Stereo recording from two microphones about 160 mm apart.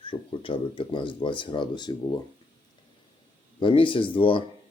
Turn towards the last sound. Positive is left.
turn(degrees=35)  # may be behind; listen again after turning